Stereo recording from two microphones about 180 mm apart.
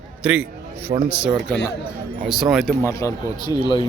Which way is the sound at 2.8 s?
15° left (ahead or behind).